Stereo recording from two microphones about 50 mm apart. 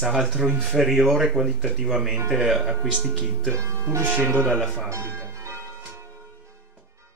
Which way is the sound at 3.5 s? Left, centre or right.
Right.